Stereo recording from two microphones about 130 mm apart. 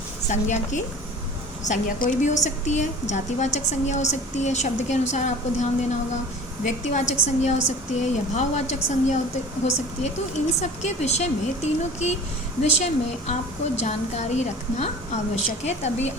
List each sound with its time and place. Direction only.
0.3 s a woman's voice: 65° left (ahead or behind)
6.7 s a woman's voice: 65° left (ahead or behind)